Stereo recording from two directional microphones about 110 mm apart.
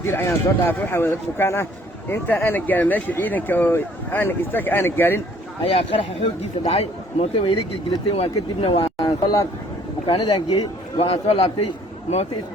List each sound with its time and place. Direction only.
0.0 s speech: 25° left (ahead or behind)
6.7 s speech: 70° left (ahead or behind); by 10.4 s 45° left (ahead or behind)
10.5 s speech: 65° left (ahead or behind)